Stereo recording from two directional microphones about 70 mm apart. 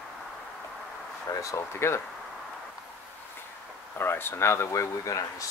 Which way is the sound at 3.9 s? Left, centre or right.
Left.